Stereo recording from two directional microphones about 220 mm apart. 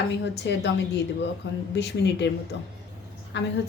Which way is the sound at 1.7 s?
50° left (ahead or behind).